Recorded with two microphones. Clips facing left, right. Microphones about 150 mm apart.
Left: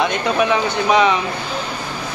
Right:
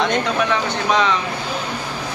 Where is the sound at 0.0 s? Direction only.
10° left (ahead or behind).